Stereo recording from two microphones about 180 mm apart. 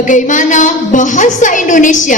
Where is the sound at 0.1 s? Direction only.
45° left (ahead or behind).